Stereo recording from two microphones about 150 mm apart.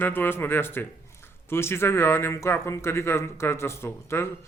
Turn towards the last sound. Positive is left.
turn(degrees=15)  # may be behind; listen again after turning